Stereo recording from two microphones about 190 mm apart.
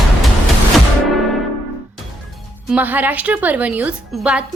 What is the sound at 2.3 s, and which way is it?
Speech, 5° right (ahead or behind).